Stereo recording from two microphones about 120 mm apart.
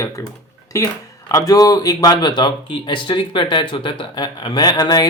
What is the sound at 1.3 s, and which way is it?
Speech, 30° left (ahead or behind).